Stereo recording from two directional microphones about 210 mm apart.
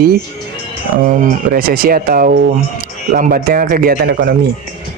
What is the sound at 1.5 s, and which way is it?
Speech, 45° right (ahead or behind).